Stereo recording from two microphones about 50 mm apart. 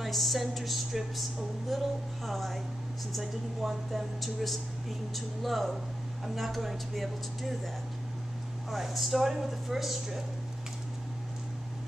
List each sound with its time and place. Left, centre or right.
0.0 s speech: centre
8.6 s speech: centre